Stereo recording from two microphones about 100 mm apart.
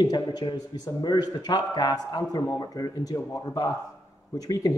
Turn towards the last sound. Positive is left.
turn(degrees=35)  # may be behind; listen again after turning